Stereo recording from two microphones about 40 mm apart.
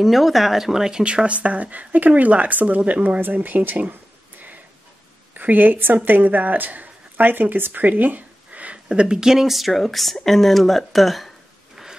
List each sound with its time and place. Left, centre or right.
0.0 s speech: centre; by 3.9 s right
5.3 s a woman's voice: right
8.8 s a woman's voice: right; by 11.8 s centre